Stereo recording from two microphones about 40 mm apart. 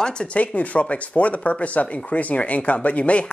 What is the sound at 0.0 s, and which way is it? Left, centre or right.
Speech, left.